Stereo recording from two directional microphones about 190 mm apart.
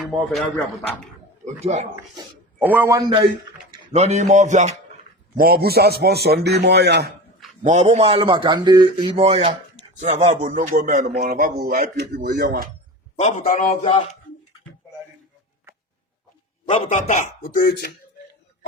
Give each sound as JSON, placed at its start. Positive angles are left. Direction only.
{"t": 0.0, "sound": "a man's voice", "side_deg": 0}
{"t": 1.6, "sound": "music", "side_deg": -35}
{"t": 2.6, "sound": "a man's voice", "side_deg": -10}
{"t": 3.9, "sound": "music", "side_deg": -35}
{"t": 5.4, "sound": "a man's voice", "side_deg": -50}
{"t": 7.6, "sound": "speech", "side_deg": -35}
{"t": 10.0, "sound": "music", "side_deg": -35}
{"t": 11.1, "sound": "speech", "side_deg": -50}
{"t": 13.1, "sound": "a man's voice", "side_deg": 40}
{"t": 16.6, "sound": "a man's voice", "side_deg": 30}